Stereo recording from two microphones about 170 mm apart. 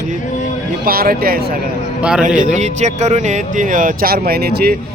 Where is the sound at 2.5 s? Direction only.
45° right (ahead or behind).